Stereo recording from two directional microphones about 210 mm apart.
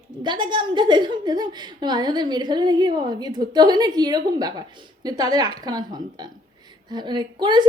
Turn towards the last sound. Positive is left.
turn(degrees=-20)  # may be behind; listen again after turning